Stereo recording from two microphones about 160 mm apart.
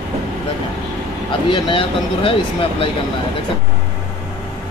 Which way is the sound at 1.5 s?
30° left (ahead or behind).